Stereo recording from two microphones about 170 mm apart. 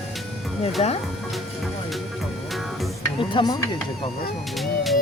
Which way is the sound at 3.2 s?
25° left (ahead or behind).